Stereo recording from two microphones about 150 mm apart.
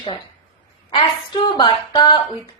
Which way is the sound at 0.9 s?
35° left (ahead or behind).